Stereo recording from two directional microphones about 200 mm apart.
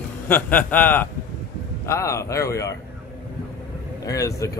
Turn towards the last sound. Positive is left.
turn(degrees=15)  # may be behind; listen again after turning